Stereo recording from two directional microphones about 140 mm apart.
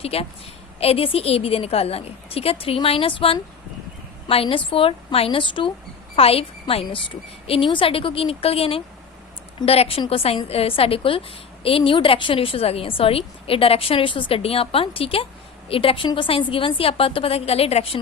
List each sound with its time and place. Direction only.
0.0 s a woman's voice: 45° left (ahead or behind)